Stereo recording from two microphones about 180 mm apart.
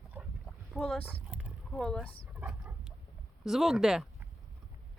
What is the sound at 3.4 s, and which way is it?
Speech, centre (ahead or behind).